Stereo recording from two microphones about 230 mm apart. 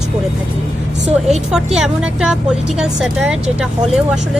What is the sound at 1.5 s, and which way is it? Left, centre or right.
A woman's voice, centre.